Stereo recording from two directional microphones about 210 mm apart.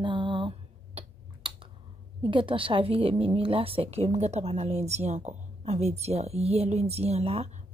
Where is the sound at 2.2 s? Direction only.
25° right (ahead or behind).